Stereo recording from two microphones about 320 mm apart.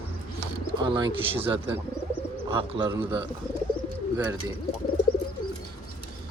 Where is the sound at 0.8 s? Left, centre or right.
Centre.